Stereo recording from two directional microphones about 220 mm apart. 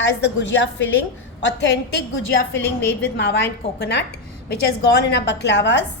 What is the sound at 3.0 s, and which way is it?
A woman's voice, 50° left (ahead or behind).